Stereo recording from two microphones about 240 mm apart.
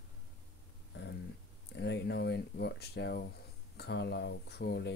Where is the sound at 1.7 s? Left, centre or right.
Left.